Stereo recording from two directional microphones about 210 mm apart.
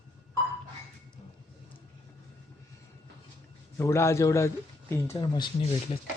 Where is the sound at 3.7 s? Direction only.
15° left (ahead or behind).